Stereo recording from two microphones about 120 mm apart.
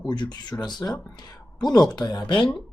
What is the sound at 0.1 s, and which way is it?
Speech, 40° left (ahead or behind).